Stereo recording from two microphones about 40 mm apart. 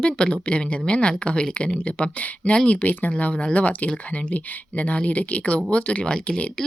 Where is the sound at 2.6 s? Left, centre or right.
Left.